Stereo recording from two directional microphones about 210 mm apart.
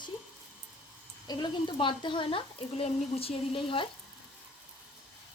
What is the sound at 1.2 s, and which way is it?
A woman's voice, 20° left (ahead or behind).